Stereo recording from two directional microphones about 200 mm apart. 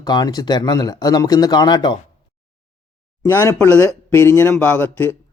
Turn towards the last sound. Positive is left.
turn(degrees=10)  # may be behind; listen again after turning